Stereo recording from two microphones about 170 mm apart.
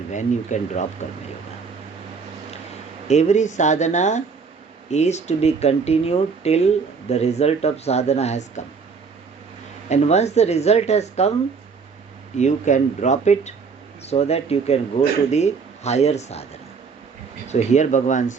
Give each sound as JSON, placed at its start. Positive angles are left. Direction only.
{"t": 0.1, "sound": "speech", "side_deg": 45}
{"t": 3.1, "sound": "speech", "side_deg": 40}
{"t": 9.9, "sound": "speech", "side_deg": 40}
{"t": 12.4, "sound": "speech", "side_deg": 45}